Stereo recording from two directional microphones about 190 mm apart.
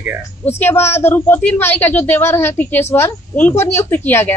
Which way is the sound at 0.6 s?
10° left (ahead or behind).